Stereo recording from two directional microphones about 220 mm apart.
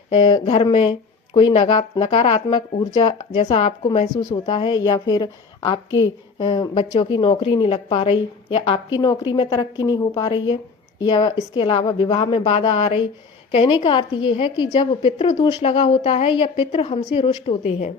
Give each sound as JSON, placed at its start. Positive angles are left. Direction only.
{"t": 0.1, "sound": "a woman's voice", "side_deg": 20}